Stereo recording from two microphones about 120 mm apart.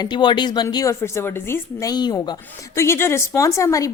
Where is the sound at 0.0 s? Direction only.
40° left (ahead or behind); by 1.9 s 20° left (ahead or behind).